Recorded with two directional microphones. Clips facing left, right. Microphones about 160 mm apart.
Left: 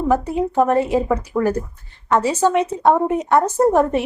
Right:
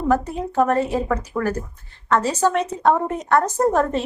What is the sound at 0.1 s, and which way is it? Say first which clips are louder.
A woman's voice: left 2 dB; 15° left (ahead or behind).